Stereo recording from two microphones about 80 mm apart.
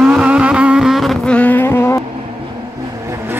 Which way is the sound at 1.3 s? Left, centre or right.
Left.